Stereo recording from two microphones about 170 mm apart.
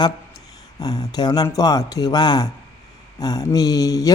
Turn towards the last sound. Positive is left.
turn(degrees=20)  # may be behind; listen again after turning